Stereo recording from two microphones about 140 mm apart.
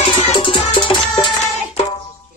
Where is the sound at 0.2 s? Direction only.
40° left (ahead or behind).